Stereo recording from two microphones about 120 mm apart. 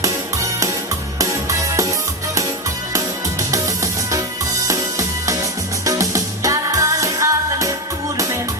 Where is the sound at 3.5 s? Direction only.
25° right (ahead or behind).